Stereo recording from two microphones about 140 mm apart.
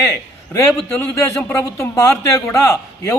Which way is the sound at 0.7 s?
5° left (ahead or behind).